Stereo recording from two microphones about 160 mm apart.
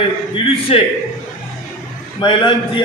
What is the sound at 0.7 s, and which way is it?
Speech, 35° left (ahead or behind).